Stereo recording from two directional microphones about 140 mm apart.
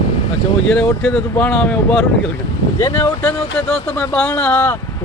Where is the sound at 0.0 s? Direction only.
45° left (ahead or behind).